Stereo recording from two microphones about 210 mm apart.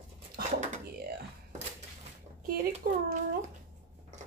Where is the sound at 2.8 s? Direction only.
40° right (ahead or behind).